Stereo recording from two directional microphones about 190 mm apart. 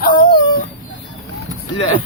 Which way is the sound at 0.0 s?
50° left (ahead or behind).